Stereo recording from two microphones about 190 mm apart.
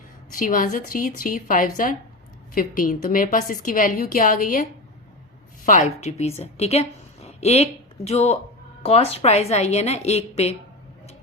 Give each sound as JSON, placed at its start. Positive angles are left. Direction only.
{"t": 0.3, "sound": "a woman's voice", "side_deg": 45}
{"t": 6.0, "sound": "a woman's voice", "side_deg": 35}